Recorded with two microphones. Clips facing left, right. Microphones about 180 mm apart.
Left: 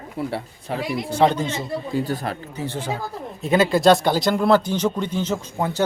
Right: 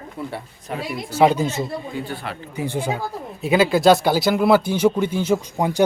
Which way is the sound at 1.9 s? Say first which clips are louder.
Left 5 dB; 40° left (ahead or behind).